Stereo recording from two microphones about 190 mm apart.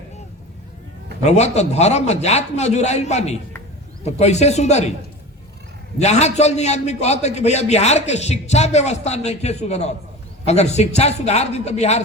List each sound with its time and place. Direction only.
1.3 s a man's voice: 35° left (ahead or behind)
6.0 s a man's voice: 35° left (ahead or behind)